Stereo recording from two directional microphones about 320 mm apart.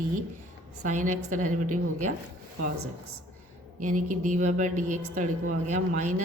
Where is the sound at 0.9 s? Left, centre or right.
Right.